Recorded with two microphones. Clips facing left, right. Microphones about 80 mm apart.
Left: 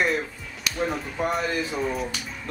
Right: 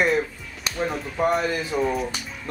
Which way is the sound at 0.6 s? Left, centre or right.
Right.